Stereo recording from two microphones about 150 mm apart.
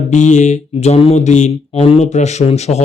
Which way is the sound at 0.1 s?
50° left (ahead or behind).